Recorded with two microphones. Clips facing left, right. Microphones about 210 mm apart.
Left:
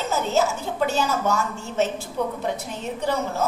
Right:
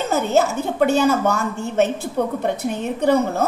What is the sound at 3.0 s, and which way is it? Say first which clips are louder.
Speech: right 7 dB; 60° right (ahead or behind).